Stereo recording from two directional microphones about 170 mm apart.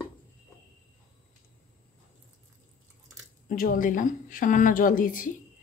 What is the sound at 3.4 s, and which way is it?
A woman's voice, 55° left (ahead or behind).